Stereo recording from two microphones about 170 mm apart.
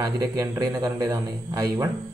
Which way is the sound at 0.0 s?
20° right (ahead or behind).